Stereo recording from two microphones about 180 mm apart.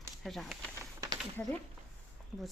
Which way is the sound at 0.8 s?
20° right (ahead or behind).